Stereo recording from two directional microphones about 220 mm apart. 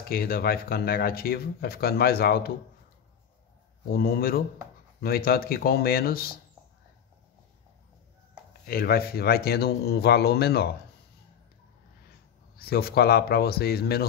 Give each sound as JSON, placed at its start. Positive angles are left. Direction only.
{"t": 0.1, "sound": "speech", "side_deg": 45}
{"t": 3.9, "sound": "speech", "side_deg": 45}
{"t": 8.6, "sound": "speech", "side_deg": 45}
{"t": 12.5, "sound": "speech", "side_deg": 45}